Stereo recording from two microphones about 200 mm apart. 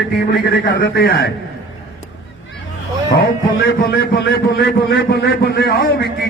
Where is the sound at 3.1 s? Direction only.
55° left (ahead or behind).